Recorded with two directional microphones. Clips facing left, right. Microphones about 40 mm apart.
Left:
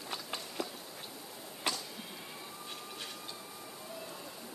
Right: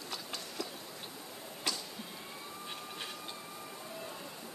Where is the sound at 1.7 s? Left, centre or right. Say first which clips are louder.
Left 2 dB; left.